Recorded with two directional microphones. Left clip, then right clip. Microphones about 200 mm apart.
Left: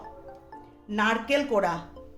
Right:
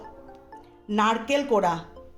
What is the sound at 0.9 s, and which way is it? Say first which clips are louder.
Speech: right 2 dB; 30° right (ahead or behind).